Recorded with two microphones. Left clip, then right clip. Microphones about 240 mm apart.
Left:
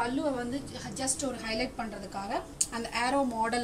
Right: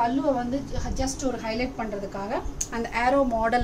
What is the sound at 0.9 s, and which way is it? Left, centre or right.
A woman's voice, centre.